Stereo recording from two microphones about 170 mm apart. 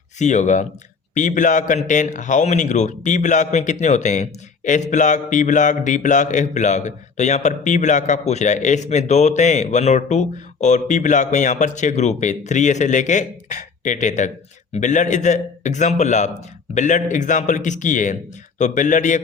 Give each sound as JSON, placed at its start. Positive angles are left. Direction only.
{"t": 0.2, "sound": "a man's voice", "side_deg": 45}